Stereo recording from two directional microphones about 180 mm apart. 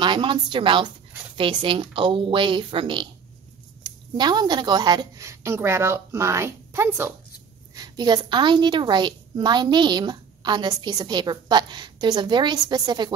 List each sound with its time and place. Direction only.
0.0 s a woman's voice: 25° right (ahead or behind)